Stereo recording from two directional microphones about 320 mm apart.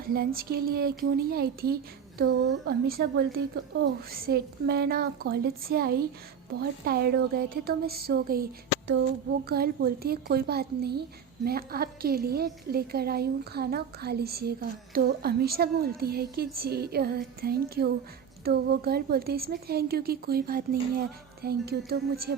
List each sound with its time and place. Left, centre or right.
0.0 s a woman's voice: right